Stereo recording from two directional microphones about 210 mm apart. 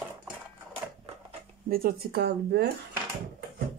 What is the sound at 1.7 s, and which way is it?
Speech, 45° right (ahead or behind).